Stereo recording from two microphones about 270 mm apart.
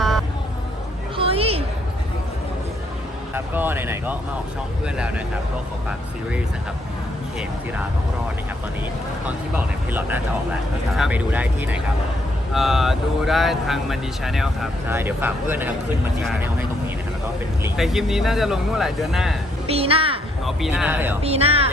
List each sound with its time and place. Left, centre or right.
1.1 s a sound: right
3.3 s speech: centre
9.2 s speech: centre
19.6 s a child's voice: right
20.4 s speech: centre
21.2 s speech: right